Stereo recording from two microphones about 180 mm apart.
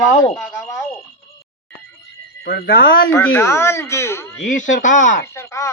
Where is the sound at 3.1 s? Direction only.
15° left (ahead or behind).